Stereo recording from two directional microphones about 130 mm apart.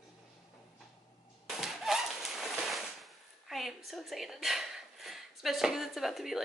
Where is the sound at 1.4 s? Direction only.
Centre (ahead or behind).